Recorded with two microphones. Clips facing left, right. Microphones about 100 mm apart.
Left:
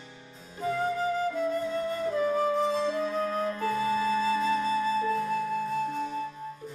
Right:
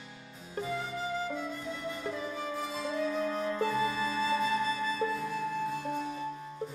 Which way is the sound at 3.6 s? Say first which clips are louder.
Left 4 dB; 45° left (ahead or behind).